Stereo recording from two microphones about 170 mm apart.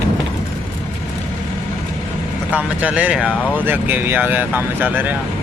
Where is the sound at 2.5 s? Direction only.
10° right (ahead or behind).